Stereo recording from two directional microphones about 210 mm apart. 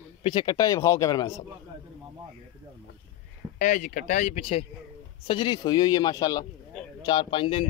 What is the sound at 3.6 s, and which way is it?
Speech, 40° left (ahead or behind).